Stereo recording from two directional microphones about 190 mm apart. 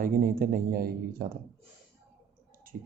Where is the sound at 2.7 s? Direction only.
50° right (ahead or behind).